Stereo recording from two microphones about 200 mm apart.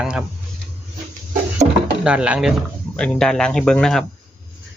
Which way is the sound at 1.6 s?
25° right (ahead or behind).